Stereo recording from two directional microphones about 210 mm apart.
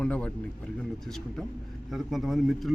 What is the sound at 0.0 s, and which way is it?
A man's voice, 5° left (ahead or behind).